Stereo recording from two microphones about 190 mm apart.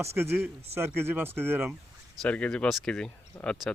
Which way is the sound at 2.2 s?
5° left (ahead or behind).